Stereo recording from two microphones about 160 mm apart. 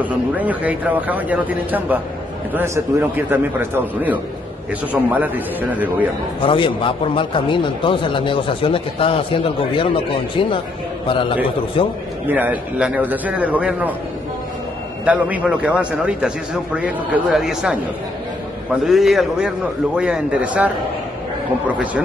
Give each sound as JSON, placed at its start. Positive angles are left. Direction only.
{"t": 0.0, "sound": "speech", "side_deg": -10}
{"t": 6.4, "sound": "a man's voice", "side_deg": 30}
{"t": 11.1, "sound": "a man's voice", "side_deg": 30}
{"t": 12.3, "sound": "speech", "side_deg": -10}
{"t": 15.0, "sound": "a man's voice", "side_deg": -10}